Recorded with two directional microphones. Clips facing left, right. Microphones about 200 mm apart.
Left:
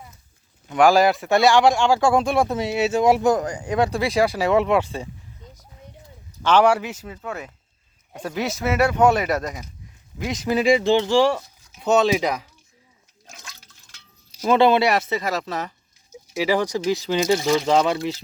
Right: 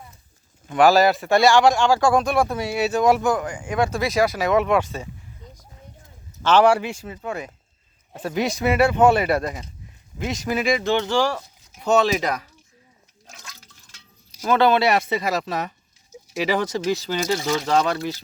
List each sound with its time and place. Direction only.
0.8 s speech: 15° left (ahead or behind)
3.2 s speech: 40° left (ahead or behind)
6.4 s speech: 10° left (ahead or behind)
6.9 s speech: 10° right (ahead or behind)
10.2 s speech: 20° left (ahead or behind)
14.4 s speech: 25° left (ahead or behind)
14.8 s speech: centre (ahead or behind)
16.9 s speech: 15° left (ahead or behind)
17.8 s speech: 25° left (ahead or behind)